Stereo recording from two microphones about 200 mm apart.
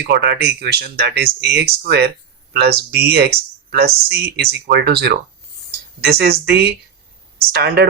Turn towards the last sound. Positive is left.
turn(degrees=-55)  # may be behind; listen again after turning